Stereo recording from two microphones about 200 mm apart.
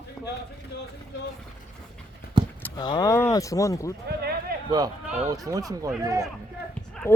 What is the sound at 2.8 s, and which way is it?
Speech, 20° left (ahead or behind).